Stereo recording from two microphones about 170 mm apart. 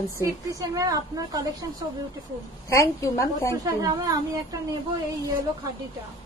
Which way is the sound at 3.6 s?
20° right (ahead or behind).